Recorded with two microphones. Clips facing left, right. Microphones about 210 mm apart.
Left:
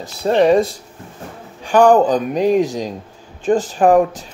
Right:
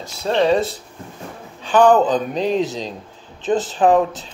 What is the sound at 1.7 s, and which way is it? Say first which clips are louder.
Speech: left 2 dB; 10° left (ahead or behind).